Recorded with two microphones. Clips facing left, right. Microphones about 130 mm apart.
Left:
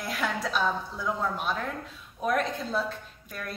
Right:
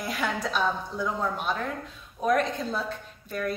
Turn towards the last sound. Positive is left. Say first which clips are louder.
# right 8 dB
turn(degrees=0)  # may be behind; listen again after turning